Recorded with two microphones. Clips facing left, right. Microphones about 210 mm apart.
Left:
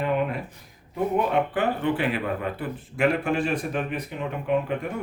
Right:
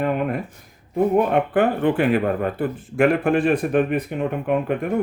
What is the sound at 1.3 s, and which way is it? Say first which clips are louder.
Speech: right 5 dB; 50° right (ahead or behind).